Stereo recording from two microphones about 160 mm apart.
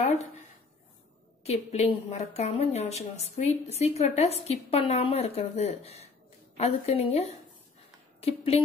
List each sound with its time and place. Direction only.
1.4 s a woman's voice: 40° left (ahead or behind)